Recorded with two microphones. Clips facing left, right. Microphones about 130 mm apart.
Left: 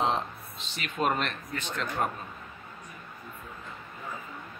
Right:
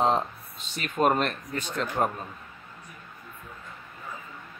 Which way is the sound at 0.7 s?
45° right (ahead or behind).